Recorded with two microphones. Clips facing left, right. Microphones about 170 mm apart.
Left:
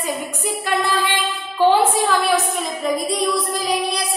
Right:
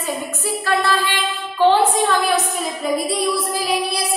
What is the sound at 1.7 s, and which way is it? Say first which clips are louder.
Music: right 1 dB; 5° left (ahead or behind).